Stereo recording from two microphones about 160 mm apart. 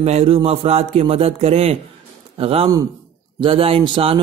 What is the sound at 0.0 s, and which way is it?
Speech, 40° right (ahead or behind).